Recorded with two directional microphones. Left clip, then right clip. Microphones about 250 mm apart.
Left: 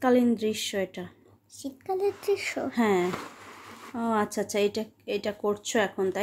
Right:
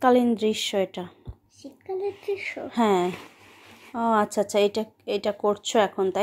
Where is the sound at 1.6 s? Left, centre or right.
Left.